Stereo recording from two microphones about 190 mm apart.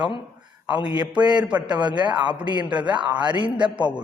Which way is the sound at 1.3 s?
5° right (ahead or behind).